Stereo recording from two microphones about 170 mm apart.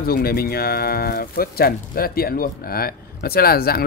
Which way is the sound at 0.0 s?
65° left (ahead or behind).